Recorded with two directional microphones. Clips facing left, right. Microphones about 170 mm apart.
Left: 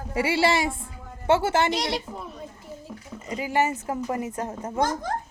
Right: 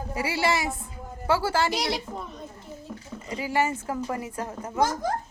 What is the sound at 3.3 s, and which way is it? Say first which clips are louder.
A woman's voice: left 2 dB; 20° left (ahead or behind).